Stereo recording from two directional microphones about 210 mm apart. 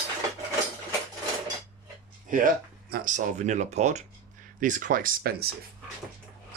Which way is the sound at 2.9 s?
40° right (ahead or behind).